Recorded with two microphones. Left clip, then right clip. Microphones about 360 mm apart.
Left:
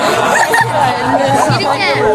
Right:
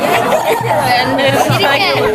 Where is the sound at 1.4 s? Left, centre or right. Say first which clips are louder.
Right 1 dB; centre.